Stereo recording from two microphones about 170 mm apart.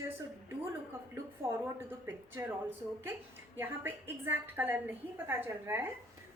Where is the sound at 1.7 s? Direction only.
15° right (ahead or behind).